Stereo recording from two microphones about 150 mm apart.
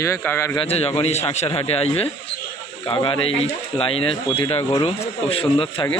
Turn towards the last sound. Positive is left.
turn(degrees=35)  # may be behind; listen again after turning